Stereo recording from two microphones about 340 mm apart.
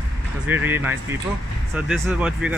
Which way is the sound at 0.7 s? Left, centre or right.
Centre.